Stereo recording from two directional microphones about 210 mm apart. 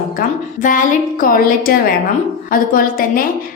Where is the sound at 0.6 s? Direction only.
40° left (ahead or behind).